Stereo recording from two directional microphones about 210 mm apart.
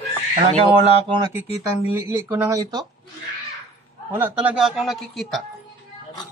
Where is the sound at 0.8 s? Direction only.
25° right (ahead or behind).